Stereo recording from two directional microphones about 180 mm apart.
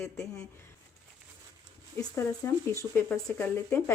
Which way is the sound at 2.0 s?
15° left (ahead or behind).